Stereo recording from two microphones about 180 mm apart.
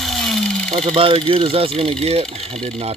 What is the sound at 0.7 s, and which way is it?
Speech, 35° right (ahead or behind).